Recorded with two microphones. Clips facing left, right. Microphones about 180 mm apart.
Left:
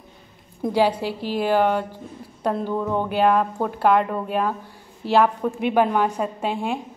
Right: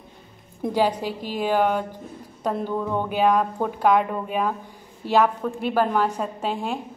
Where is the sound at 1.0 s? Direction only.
45° right (ahead or behind).